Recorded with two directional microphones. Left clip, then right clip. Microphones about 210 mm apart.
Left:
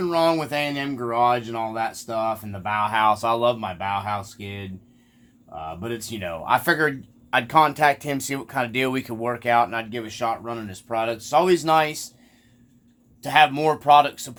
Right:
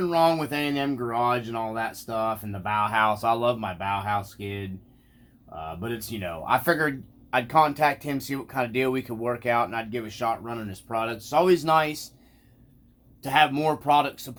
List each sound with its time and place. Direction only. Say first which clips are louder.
0.0 s a man's voice: left 1 dB; 20° left (ahead or behind)
5.8 s a man's voice: left 2 dB; 20° left (ahead or behind)
13.2 s a man's voice: left 4 dB; 25° left (ahead or behind)